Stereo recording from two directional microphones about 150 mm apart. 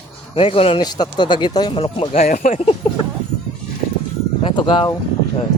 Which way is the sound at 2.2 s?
60° left (ahead or behind).